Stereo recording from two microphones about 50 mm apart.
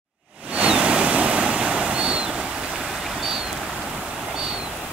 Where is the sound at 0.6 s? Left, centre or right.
Right.